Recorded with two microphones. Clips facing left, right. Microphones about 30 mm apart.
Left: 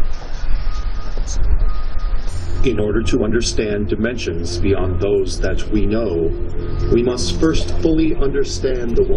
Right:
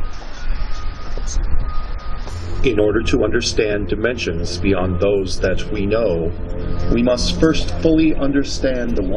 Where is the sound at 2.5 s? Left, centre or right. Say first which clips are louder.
Right 2 dB; centre.